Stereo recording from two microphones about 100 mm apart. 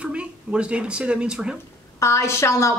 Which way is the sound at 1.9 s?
30° left (ahead or behind).